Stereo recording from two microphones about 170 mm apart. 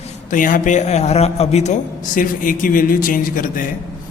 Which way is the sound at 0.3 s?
50° left (ahead or behind).